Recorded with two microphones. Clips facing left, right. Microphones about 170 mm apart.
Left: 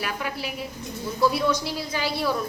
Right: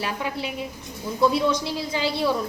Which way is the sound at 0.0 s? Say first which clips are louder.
Right 2 dB; 25° right (ahead or behind).